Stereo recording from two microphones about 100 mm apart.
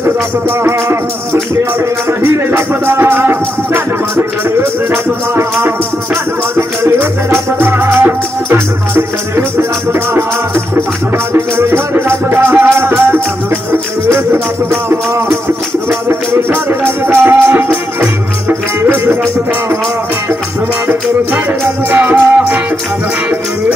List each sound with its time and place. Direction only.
0.7 s music: 25° right (ahead or behind)
6.5 s music: 25° right (ahead or behind)
11.3 s music: 25° right (ahead or behind)
21.9 s music: 20° right (ahead or behind)